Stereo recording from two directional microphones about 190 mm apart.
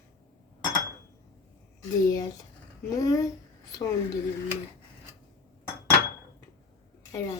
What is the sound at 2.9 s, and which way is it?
Speech, 15° left (ahead or behind).